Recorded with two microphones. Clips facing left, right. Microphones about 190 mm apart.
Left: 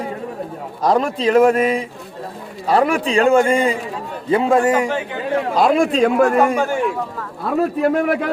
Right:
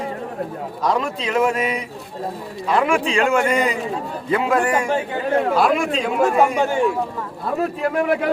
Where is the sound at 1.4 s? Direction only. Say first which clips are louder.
Left 6 dB; 50° left (ahead or behind).